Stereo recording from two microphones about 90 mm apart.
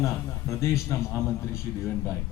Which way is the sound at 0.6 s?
35° left (ahead or behind).